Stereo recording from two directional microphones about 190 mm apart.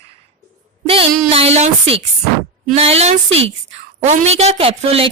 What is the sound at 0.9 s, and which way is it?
A woman's voice, 30° right (ahead or behind).